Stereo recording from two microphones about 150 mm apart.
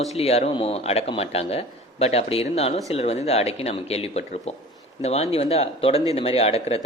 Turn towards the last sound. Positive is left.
turn(degrees=40)  # may be behind; listen again after turning